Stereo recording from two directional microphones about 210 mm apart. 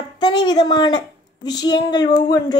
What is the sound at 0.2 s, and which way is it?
A woman's voice, 20° left (ahead or behind).